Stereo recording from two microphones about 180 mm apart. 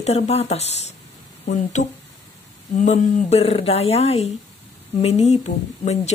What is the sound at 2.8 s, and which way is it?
Speech, 35° left (ahead or behind).